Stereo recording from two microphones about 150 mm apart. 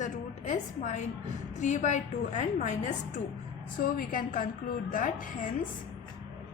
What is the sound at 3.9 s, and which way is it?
A woman's voice, 65° left (ahead or behind).